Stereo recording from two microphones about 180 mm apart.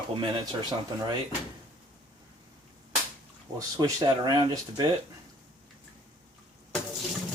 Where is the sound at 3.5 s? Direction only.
20° right (ahead or behind).